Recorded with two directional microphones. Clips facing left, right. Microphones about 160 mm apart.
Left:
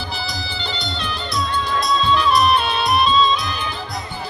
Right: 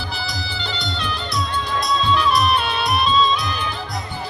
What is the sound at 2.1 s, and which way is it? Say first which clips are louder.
Music: left 3 dB; 25° left (ahead or behind).